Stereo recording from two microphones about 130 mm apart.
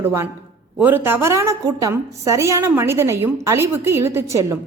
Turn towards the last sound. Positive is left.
turn(degrees=-20)  # may be behind; listen again after turning